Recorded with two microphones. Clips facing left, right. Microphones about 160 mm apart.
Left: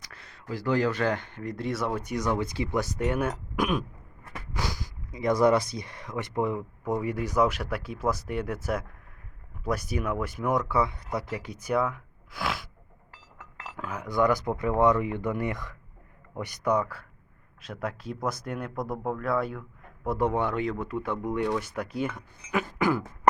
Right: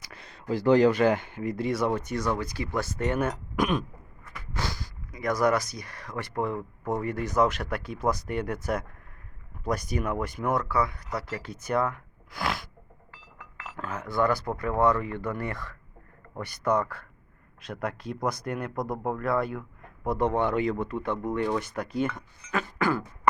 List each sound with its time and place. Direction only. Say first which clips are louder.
0.0 s speech: right 4 dB; 15° right (ahead or behind); by 3.8 s 5° left (ahead or behind)
4.2 s a sound: left 4 dB; 30° left (ahead or behind)
4.5 s a sound: even; 15° left (ahead or behind)
5.1 s speech: left 3 dB; 25° left (ahead or behind)
6.6 s speech: left 1 dB; 5° left (ahead or behind)
10.7 s speech: left 1 dB; 25° left (ahead or behind); by 12.6 s 5° left (ahead or behind)
13.7 s speech: left 1 dB; 10° left (ahead or behind)